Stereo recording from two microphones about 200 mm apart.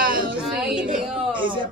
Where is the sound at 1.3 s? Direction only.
25° right (ahead or behind).